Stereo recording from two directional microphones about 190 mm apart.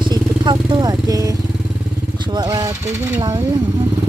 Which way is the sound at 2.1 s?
25° right (ahead or behind).